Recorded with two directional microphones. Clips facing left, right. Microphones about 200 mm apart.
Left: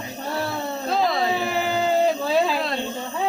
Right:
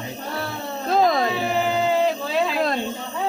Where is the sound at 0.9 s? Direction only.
45° right (ahead or behind).